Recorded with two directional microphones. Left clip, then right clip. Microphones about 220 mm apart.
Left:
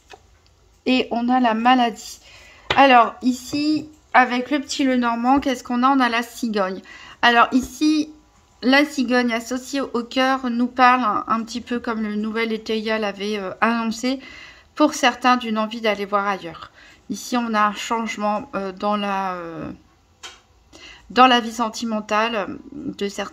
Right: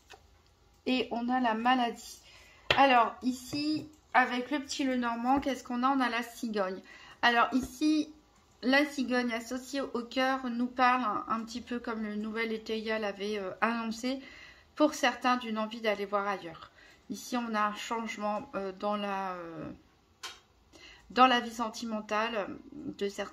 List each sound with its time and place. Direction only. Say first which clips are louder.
0.8 s speech: left 11 dB; 50° left (ahead or behind)
20.7 s speech: left 12 dB; 35° left (ahead or behind)